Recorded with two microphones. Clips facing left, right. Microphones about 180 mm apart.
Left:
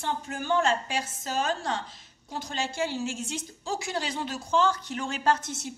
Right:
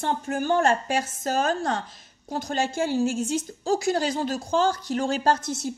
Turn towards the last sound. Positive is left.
turn(degrees=-35)  # may be behind; listen again after turning